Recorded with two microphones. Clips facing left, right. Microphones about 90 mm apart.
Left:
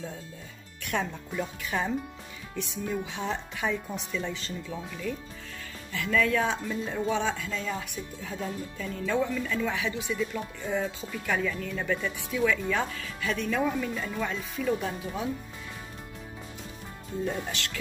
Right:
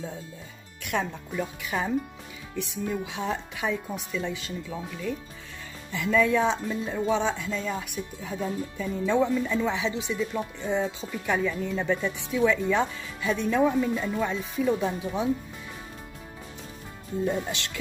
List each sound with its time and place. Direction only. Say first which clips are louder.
0.8 s speech: right 2 dB; 5° right (ahead or behind)
6.7 s speech: right 3 dB; 10° right (ahead or behind)
12.1 s speech: right 3 dB; 20° right (ahead or behind)
13.6 s speech: right 5 dB; 10° right (ahead or behind)
17.2 s speech: right 4 dB; 15° right (ahead or behind)